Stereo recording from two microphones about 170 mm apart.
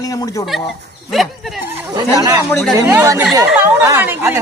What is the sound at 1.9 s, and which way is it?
Speech, 20° right (ahead or behind).